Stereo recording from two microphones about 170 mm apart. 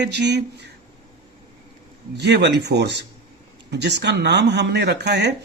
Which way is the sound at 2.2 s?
85° right.